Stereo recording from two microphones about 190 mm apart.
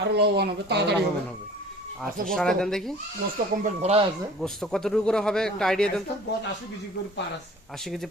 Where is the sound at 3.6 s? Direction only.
35° right (ahead or behind).